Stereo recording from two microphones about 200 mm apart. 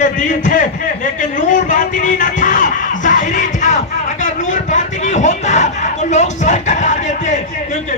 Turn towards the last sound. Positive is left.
turn(degrees=35)  # may be behind; listen again after turning